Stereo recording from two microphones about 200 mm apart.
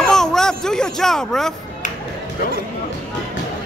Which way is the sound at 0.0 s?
Centre (ahead or behind).